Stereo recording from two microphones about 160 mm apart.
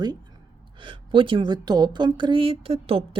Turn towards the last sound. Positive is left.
turn(degrees=-35)  # may be behind; listen again after turning